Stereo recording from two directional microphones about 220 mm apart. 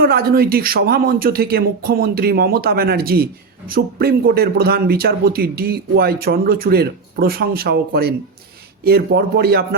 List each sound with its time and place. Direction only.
0.0 s a man's voice: 45° right (ahead or behind)